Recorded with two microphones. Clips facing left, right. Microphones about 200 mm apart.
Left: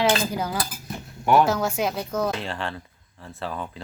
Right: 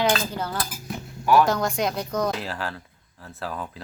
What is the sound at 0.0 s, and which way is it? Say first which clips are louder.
Cutlery: left 1 dB; 10° left (ahead or behind).